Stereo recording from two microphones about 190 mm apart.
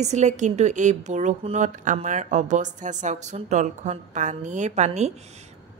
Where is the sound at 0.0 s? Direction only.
35° right (ahead or behind).